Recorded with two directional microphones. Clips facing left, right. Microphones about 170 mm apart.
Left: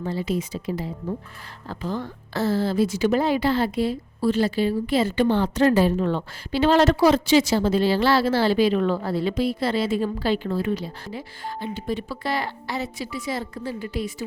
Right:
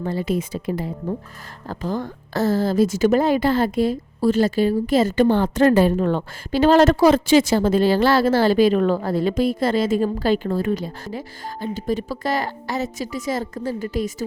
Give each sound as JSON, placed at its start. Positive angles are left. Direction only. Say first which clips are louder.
{"t": 0.0, "sound": "a woman's voice", "louder": "right 3 dB", "side_deg": -55}